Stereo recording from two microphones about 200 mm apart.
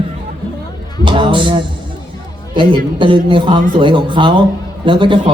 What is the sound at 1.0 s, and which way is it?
A man's voice, 25° right (ahead or behind).